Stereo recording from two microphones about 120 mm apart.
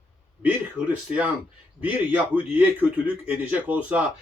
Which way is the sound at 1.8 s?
15° right (ahead or behind).